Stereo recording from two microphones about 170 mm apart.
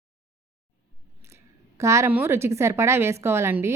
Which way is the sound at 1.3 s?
15° right (ahead or behind).